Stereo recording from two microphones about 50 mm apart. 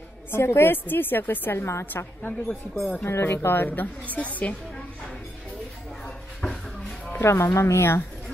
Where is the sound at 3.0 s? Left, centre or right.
Left.